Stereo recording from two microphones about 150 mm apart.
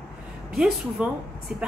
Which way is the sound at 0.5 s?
5° right (ahead or behind).